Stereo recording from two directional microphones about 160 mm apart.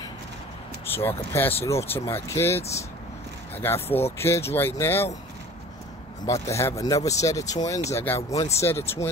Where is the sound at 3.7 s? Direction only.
40° left (ahead or behind).